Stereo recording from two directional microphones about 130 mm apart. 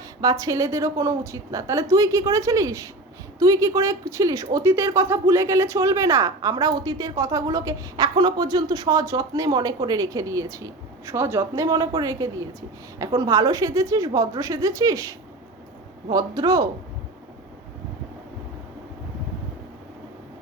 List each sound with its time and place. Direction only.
0.2 s speech: 25° right (ahead or behind)